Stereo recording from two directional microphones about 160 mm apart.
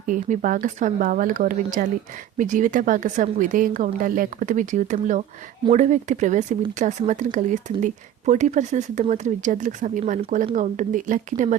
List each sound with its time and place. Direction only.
0.0 s speech: 55° right (ahead or behind)